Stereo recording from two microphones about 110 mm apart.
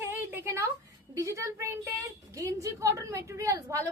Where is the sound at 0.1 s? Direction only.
20° right (ahead or behind).